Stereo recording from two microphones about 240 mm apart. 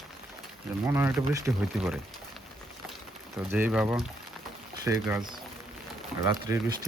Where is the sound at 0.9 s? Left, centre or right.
Centre.